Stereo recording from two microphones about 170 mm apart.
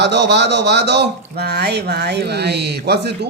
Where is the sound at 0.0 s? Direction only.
90° right.